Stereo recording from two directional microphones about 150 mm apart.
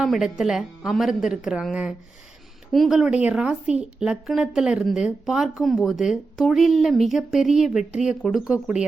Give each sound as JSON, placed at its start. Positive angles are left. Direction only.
{"t": 0.0, "sound": "speech", "side_deg": -5}